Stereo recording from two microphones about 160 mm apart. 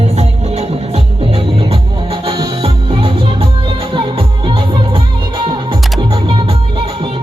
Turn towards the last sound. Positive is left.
turn(degrees=-35)  # may be behind; listen again after turning